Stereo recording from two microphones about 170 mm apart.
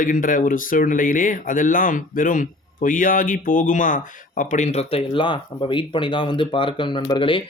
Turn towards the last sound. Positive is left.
turn(degrees=30)  # may be behind; listen again after turning